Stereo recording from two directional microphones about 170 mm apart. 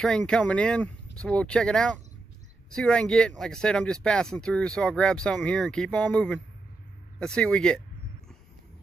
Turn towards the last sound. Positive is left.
turn(degrees=5)  # may be behind; listen again after turning